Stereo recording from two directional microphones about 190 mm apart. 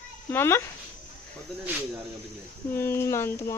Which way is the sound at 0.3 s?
10° left (ahead or behind).